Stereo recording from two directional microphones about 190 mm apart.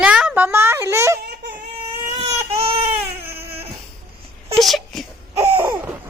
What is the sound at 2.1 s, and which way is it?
Baby cry, 30° right (ahead or behind).